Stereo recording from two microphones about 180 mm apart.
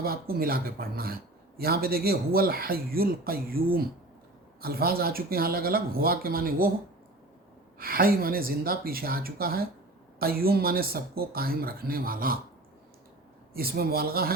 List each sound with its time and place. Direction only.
0.0 s speech: 55° right (ahead or behind)
7.8 s speech: 55° right (ahead or behind)
13.5 s speech: 55° right (ahead or behind)